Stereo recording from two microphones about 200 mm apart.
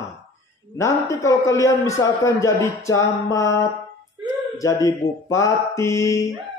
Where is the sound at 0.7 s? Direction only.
15° left (ahead or behind).